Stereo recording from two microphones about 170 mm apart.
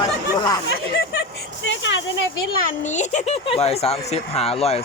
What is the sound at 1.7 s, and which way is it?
Speech, 90° left.